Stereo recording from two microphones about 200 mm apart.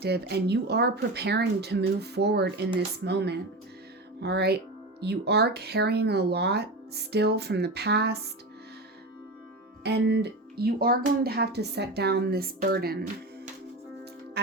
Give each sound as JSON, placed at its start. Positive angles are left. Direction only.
{"t": 0.0, "sound": "speech", "side_deg": -55}
{"t": 9.8, "sound": "speech", "side_deg": -55}